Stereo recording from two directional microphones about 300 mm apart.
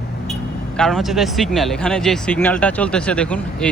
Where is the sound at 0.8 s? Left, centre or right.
Centre.